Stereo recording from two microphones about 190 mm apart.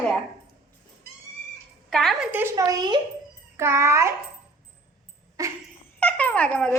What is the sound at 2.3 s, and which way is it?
A child's voice, 15° right (ahead or behind).